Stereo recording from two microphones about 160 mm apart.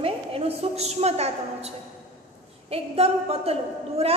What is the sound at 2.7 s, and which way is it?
A woman's voice, 40° right (ahead or behind).